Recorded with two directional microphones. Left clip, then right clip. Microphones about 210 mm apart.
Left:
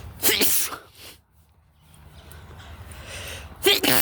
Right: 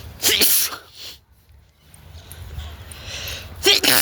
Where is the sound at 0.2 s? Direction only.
25° left (ahead or behind).